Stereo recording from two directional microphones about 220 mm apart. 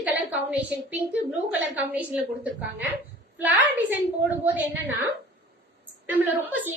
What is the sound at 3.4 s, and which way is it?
A woman's voice, 5° right (ahead or behind).